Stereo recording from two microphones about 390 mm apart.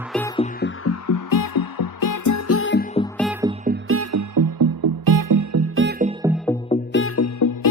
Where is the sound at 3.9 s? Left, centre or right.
Right.